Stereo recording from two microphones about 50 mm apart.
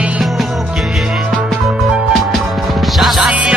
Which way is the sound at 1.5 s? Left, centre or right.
Centre.